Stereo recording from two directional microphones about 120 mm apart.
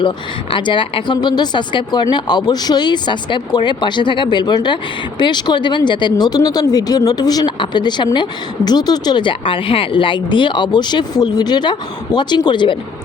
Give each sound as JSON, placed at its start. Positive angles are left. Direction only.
{"t": 0.5, "sound": "speech", "side_deg": 45}